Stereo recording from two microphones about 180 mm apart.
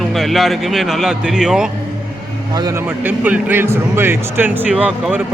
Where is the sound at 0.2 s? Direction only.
Centre (ahead or behind).